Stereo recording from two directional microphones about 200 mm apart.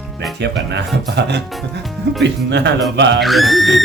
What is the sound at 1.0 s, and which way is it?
Speech, 60° right (ahead or behind).